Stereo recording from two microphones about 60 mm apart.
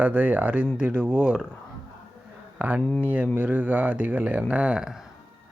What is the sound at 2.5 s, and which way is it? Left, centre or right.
Speech, right.